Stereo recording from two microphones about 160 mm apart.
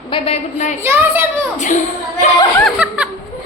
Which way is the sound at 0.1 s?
30° left (ahead or behind).